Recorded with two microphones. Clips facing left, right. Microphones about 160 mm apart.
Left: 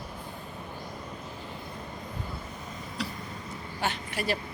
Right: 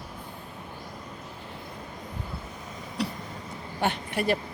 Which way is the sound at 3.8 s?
55° right (ahead or behind).